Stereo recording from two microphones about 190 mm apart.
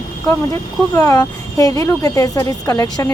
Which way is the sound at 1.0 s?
15° left (ahead or behind).